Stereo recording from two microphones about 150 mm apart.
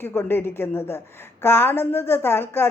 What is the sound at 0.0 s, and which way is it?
Speech, 15° left (ahead or behind).